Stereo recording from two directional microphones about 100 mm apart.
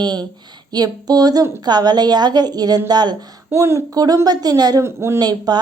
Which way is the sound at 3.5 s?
25° right (ahead or behind).